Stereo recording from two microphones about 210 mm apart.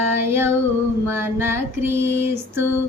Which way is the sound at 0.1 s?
10° right (ahead or behind).